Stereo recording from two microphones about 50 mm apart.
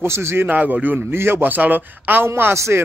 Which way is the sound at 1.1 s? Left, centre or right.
Right.